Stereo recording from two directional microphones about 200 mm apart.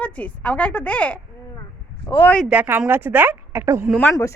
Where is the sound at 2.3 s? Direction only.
Centre (ahead or behind).